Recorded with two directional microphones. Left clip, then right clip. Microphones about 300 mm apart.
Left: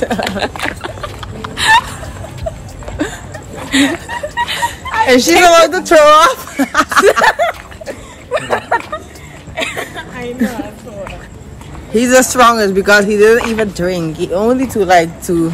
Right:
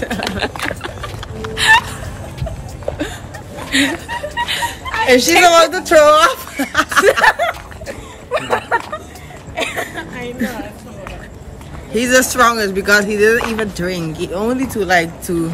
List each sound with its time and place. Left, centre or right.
0.4 s music: centre
3.7 s a sound: centre
5.4 s speech: centre
7.1 s snicker: centre
8.3 s a sound: centre
11.9 s speech: centre